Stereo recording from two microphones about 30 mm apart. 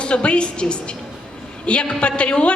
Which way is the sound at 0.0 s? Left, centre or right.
Left.